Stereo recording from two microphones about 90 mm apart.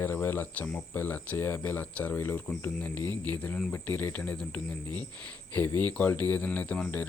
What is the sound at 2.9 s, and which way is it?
Speech, 50° right (ahead or behind).